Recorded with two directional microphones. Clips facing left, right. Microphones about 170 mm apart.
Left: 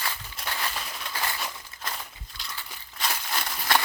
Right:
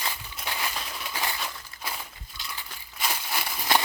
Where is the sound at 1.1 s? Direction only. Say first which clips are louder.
Even; 15° right (ahead or behind).